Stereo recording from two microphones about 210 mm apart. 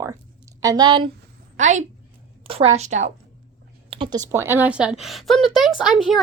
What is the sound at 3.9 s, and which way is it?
Speech, 25° right (ahead or behind).